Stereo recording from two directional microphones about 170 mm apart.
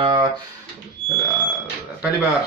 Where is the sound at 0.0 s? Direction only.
35° right (ahead or behind).